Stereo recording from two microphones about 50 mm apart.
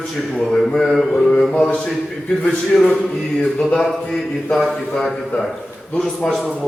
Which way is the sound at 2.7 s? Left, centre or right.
Centre.